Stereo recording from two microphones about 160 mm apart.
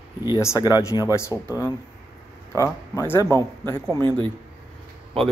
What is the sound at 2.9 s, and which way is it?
Speech, 15° left (ahead or behind).